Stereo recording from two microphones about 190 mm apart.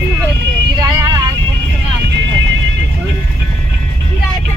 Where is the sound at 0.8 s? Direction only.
20° right (ahead or behind).